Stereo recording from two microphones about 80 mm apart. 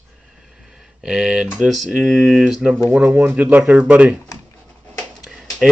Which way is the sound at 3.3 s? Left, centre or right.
Right.